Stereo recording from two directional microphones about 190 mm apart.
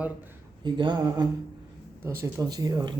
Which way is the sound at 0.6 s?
25° right (ahead or behind).